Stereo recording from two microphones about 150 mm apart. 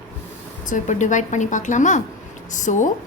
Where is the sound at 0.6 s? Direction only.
60° left (ahead or behind).